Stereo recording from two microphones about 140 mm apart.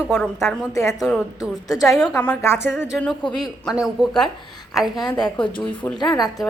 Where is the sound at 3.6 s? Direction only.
5° right (ahead or behind).